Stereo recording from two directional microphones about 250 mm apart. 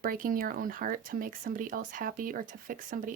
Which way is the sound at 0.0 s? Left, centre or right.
Right.